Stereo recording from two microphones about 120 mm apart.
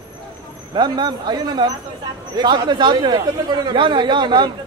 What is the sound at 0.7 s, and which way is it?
Speech, 35° right (ahead or behind).